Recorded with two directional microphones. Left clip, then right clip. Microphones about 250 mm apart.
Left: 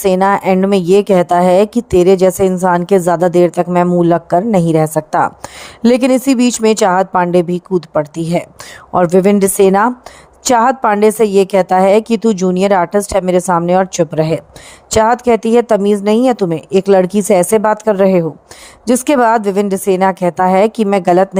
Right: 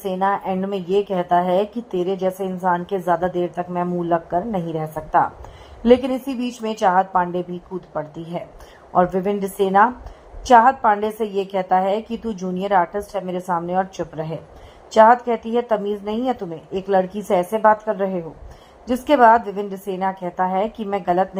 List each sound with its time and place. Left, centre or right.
0.0 s a woman's voice: left